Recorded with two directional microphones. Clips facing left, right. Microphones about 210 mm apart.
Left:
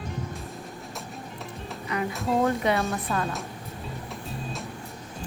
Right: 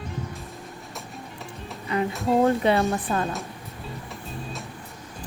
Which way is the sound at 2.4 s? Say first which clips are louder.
Right 4 dB; 30° right (ahead or behind).